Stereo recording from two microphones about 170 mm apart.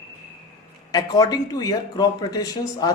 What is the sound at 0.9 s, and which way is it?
A man's voice, 20° left (ahead or behind).